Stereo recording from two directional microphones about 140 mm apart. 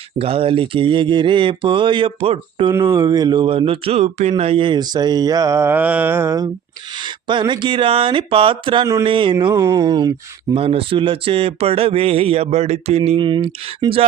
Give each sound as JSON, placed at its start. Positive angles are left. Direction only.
{"t": 0.2, "sound": "speech", "side_deg": -45}
{"t": 2.8, "sound": "speech", "side_deg": -30}
{"t": 7.0, "sound": "speech", "side_deg": -35}
{"t": 9.0, "sound": "a sound", "side_deg": -35}
{"t": 10.5, "sound": "speech", "side_deg": -40}
{"t": 13.1, "sound": "speech", "side_deg": -35}